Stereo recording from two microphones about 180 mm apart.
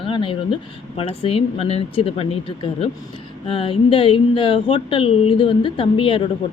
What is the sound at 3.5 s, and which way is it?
Speech, 30° left (ahead or behind).